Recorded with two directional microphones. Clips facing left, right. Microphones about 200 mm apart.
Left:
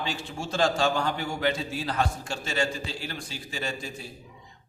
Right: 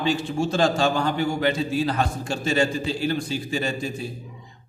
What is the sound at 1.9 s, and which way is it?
A man's voice, 20° right (ahead or behind).